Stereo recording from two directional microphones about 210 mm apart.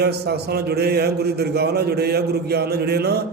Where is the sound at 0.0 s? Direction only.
50° right (ahead or behind).